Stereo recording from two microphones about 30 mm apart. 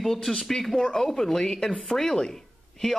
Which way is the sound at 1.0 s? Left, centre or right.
Centre.